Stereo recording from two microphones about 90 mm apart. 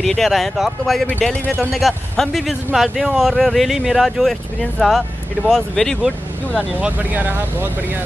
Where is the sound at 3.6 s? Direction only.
5° right (ahead or behind).